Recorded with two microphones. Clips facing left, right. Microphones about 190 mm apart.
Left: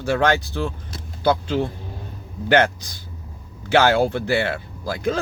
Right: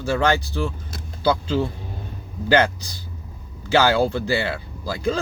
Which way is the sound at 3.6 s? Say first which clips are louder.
Left 1 dB; 55° left (ahead or behind).